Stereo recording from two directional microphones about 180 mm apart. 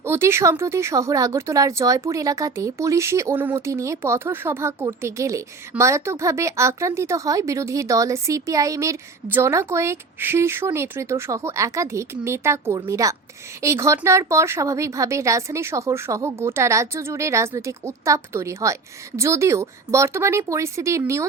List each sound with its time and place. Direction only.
0.0 s speech: 15° right (ahead or behind)